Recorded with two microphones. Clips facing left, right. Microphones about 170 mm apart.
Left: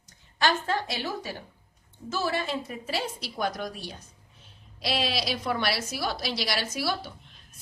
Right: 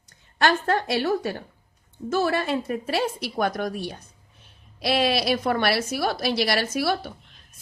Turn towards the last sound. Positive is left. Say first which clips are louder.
# right 6 dB
turn(degrees=-55)  # may be behind; listen again after turning